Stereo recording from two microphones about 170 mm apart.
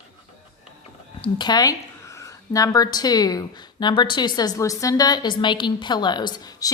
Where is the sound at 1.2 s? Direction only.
25° left (ahead or behind).